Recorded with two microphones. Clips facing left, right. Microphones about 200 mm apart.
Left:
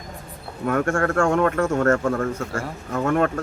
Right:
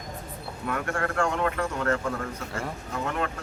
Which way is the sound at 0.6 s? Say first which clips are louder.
Left 8 dB; 50° left (ahead or behind).